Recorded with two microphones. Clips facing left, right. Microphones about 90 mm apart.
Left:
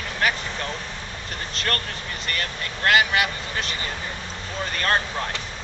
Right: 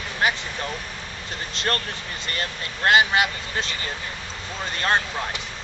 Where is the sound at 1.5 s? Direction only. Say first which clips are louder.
Right 2 dB; 25° right (ahead or behind).